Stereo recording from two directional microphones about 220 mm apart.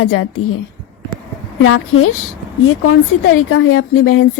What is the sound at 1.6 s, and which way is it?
Speech, 70° left (ahead or behind).